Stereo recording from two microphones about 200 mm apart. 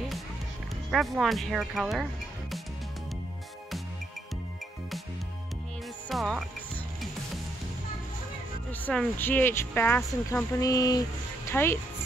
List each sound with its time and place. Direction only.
0.9 s speech: centre (ahead or behind)
6.0 s speech: centre (ahead or behind)
8.8 s speech: 10° left (ahead or behind)